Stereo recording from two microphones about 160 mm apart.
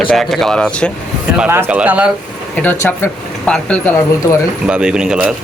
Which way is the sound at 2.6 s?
15° left (ahead or behind).